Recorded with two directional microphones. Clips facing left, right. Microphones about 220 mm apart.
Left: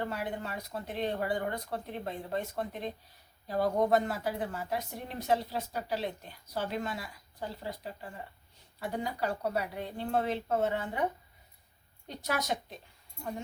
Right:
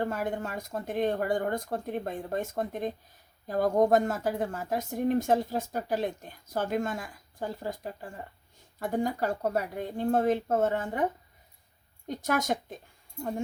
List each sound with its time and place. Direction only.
0.0 s speech: 45° right (ahead or behind)